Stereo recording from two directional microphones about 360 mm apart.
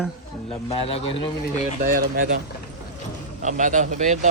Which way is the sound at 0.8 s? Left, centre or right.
Centre.